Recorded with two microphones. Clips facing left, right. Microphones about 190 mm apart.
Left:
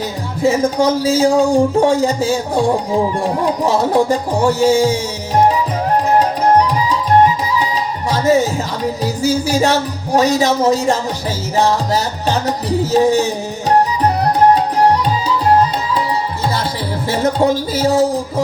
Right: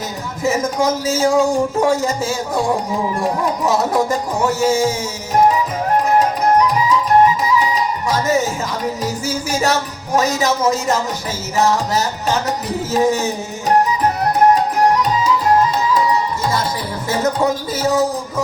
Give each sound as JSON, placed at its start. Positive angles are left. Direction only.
{"t": 0.4, "sound": "music", "side_deg": 35}
{"t": 3.4, "sound": "music", "side_deg": 30}
{"t": 6.1, "sound": "music", "side_deg": 35}